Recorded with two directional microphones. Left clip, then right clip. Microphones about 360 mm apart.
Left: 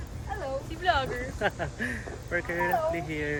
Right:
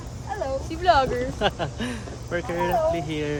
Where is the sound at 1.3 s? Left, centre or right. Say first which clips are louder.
Right 5 dB; centre.